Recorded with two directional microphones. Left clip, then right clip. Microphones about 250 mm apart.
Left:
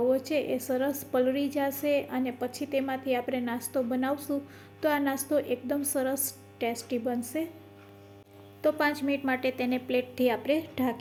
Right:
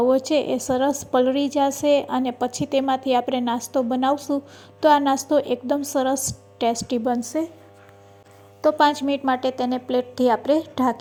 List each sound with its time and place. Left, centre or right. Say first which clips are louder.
0.0 s a woman's voice: right 8 dB; right
7.1 s a woman's voice: right 10 dB; centre
8.6 s a woman's voice: right 9 dB; right
9.5 s a woman's voice: right 6 dB; centre